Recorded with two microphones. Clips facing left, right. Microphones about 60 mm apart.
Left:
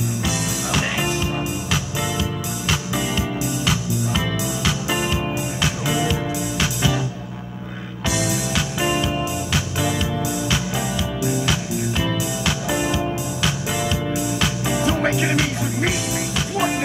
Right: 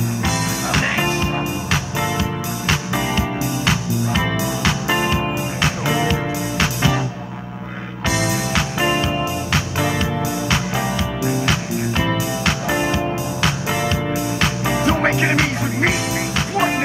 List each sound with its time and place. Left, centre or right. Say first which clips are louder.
0.2 s music: right 3 dB; right
8.1 s music: right 3 dB; right